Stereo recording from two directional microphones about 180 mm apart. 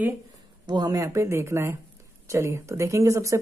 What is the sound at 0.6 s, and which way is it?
Speech, 20° right (ahead or behind).